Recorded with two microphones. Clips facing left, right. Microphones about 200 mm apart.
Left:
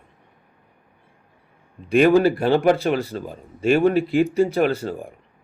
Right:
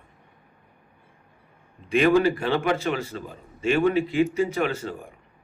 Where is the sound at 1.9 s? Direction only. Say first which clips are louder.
Left 4 dB; 40° left (ahead or behind).